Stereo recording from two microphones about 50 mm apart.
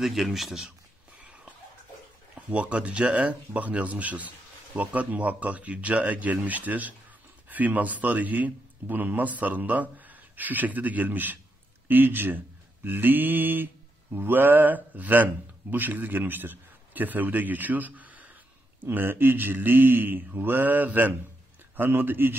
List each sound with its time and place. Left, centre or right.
0.0 s speech: centre
1.2 s a sound: right
2.5 s a man's voice: right
18.8 s a man's voice: right